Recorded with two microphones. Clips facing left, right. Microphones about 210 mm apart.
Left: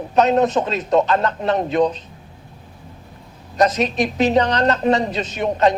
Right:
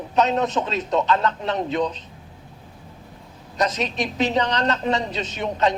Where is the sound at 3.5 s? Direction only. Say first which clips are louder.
Left 6 dB; 55° left (ahead or behind).